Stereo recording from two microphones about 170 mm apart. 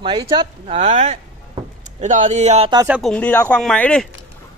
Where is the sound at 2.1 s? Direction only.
45° right (ahead or behind).